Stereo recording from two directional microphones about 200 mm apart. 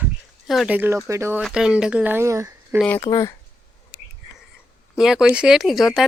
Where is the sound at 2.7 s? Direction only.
5° left (ahead or behind).